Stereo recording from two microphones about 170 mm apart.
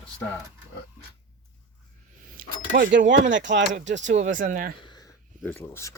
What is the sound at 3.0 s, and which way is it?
Speech, 90° right.